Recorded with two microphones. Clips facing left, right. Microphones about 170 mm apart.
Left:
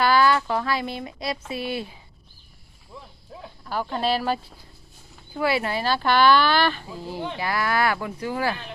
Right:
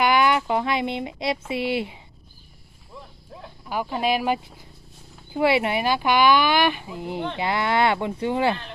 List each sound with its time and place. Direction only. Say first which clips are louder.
0.0 s speech: even; 20° right (ahead or behind)
2.9 s a sound: right 1 dB; centre (ahead or behind)
3.6 s speech: right 1 dB; 10° right (ahead or behind)